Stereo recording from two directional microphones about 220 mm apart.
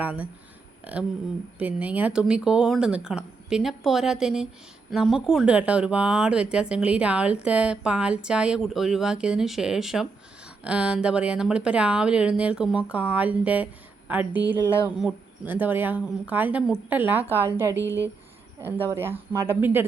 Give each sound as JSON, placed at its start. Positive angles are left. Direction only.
{"t": 0.0, "sound": "speech", "side_deg": -5}
{"t": 1.5, "sound": "speech", "side_deg": -5}